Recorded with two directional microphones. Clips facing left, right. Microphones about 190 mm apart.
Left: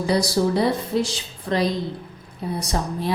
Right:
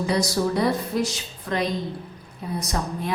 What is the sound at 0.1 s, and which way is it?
A woman's voice, 30° left (ahead or behind).